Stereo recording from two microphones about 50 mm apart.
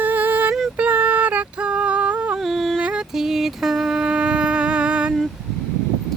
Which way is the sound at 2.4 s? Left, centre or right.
Centre.